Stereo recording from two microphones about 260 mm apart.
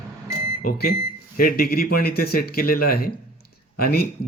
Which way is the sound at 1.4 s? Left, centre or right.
Left.